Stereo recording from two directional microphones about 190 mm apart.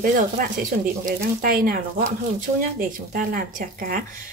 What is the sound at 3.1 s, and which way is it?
Speech, 45° right (ahead or behind).